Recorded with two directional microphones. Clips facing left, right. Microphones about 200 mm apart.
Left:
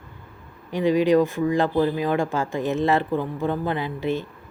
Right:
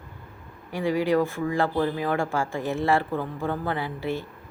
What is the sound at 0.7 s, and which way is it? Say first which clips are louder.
A woman's voice: left 5 dB; 20° left (ahead or behind).